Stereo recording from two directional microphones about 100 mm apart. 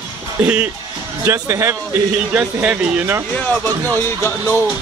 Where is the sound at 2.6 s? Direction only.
15° right (ahead or behind).